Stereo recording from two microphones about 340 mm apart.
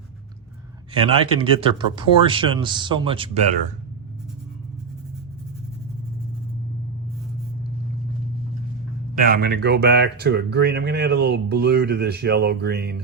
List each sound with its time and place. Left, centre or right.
0.9 s speech: centre
9.1 s speech: right